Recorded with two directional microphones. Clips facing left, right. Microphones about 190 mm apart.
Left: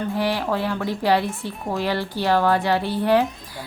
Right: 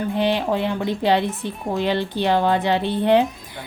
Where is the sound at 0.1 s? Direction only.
20° right (ahead or behind).